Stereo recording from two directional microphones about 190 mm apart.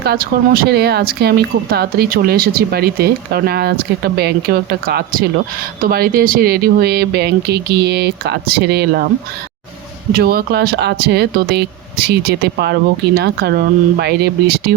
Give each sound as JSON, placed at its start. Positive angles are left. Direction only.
{"t": 0.0, "sound": "speech", "side_deg": -55}
{"t": 10.1, "sound": "speech", "side_deg": -55}